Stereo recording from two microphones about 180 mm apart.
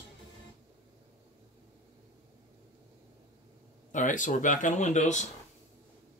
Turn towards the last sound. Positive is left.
turn(degrees=40)  # may be behind; listen again after turning